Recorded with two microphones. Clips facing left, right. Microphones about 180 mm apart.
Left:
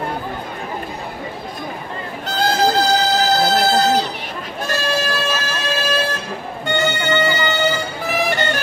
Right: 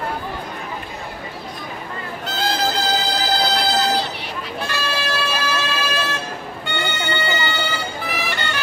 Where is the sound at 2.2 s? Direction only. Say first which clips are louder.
Left 5 dB; 40° left (ahead or behind).